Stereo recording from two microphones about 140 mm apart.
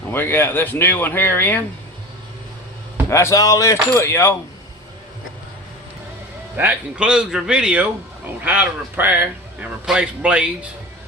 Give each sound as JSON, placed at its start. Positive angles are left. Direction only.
{"t": 0.1, "sound": "speech", "side_deg": 15}
{"t": 3.1, "sound": "speech", "side_deg": 20}
{"t": 6.6, "sound": "a man's voice", "side_deg": -10}